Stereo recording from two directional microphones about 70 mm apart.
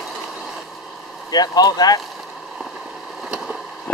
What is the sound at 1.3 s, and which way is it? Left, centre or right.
Speech, left.